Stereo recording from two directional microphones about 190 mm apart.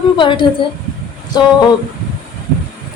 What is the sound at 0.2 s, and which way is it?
Speech, 25° left (ahead or behind).